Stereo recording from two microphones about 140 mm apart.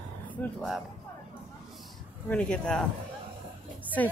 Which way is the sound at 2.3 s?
5° left (ahead or behind).